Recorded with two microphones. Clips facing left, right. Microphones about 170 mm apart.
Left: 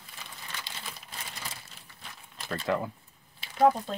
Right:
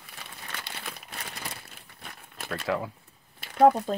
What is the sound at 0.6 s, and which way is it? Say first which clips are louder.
Crumpling: right 3 dB; 60° right (ahead or behind).